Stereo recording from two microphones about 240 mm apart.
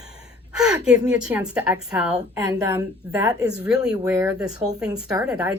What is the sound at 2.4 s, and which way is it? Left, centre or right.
A woman's voice, centre.